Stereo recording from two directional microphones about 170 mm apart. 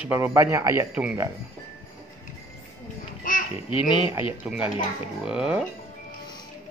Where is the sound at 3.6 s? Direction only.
30° left (ahead or behind).